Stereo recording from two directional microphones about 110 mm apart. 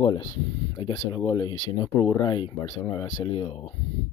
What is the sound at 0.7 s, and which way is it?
Speech, 40° left (ahead or behind).